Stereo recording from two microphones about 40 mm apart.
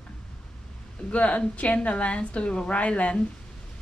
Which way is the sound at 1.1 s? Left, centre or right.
Left.